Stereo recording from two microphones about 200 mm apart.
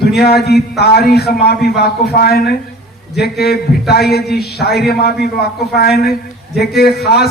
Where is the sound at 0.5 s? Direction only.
55° left (ahead or behind).